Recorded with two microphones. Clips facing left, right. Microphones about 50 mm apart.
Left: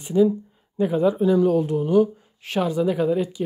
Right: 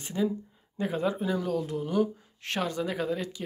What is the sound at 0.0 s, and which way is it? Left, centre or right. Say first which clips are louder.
Speech: left 11 dB; centre.